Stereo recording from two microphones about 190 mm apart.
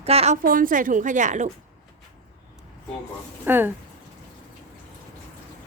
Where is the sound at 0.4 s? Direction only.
45° right (ahead or behind).